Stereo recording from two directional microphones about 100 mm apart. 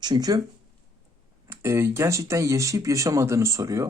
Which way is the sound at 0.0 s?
45° right (ahead or behind).